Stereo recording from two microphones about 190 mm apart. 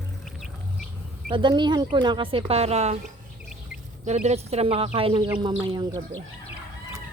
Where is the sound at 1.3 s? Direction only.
25° right (ahead or behind).